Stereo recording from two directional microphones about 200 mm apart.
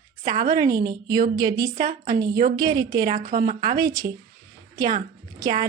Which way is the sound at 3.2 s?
40° right (ahead or behind).